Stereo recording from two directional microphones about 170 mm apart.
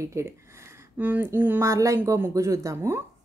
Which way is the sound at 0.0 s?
15° right (ahead or behind).